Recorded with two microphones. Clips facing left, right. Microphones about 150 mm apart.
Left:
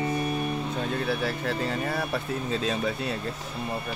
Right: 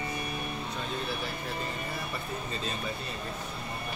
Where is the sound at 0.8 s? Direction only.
70° left (ahead or behind); by 2.9 s 90° left.